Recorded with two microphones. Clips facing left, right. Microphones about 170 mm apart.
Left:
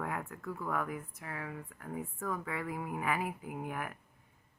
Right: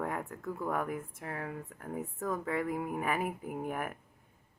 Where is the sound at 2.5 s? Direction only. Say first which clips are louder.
Right 5 dB; 45° right (ahead or behind).